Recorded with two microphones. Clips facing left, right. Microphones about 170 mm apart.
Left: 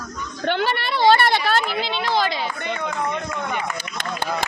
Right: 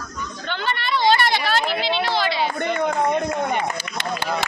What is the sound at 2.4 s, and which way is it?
Speech, 45° right (ahead or behind).